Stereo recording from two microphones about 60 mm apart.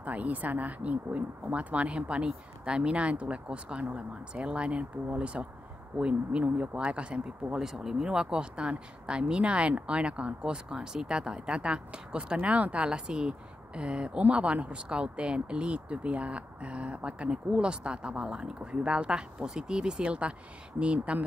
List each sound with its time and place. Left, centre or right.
0.0 s speech: right